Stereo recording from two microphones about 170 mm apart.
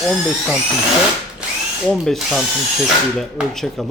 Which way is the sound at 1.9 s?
Centre (ahead or behind).